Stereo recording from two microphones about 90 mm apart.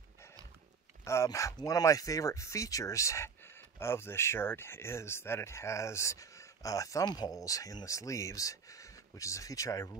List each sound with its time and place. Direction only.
1.0 s speech: 35° left (ahead or behind)